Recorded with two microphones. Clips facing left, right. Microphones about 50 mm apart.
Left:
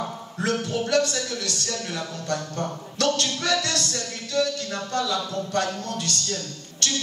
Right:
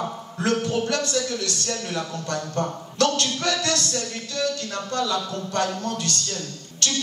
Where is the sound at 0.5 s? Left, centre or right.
Right.